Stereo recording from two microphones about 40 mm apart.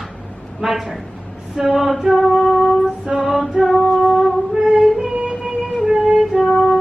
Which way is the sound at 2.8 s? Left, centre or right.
Right.